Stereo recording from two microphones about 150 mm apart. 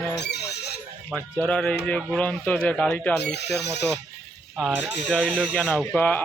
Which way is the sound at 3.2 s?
90° left.